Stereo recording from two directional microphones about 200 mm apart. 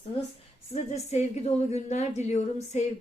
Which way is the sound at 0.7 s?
35° left (ahead or behind).